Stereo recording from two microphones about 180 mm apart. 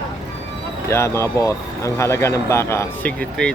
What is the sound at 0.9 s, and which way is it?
Speech, 15° left (ahead or behind).